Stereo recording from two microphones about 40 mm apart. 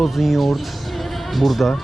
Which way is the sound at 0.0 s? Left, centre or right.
Centre.